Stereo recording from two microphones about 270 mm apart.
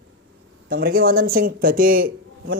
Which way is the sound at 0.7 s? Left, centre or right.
Right.